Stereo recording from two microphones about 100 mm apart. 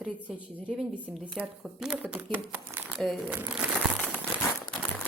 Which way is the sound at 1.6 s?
5° right (ahead or behind).